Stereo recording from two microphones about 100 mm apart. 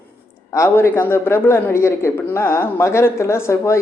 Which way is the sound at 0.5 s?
25° left (ahead or behind).